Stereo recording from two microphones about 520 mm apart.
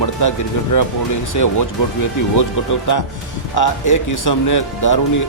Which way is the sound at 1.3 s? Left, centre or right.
Left.